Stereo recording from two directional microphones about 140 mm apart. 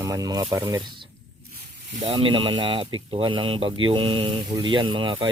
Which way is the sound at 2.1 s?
40° right (ahead or behind).